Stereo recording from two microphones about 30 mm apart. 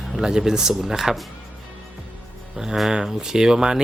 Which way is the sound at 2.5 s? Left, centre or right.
Centre.